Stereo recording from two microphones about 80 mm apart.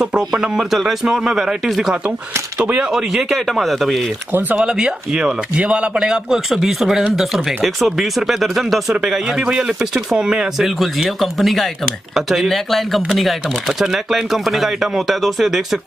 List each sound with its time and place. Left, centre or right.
0.0 s speech: centre
4.3 s speech: right
4.6 s a man's voice: centre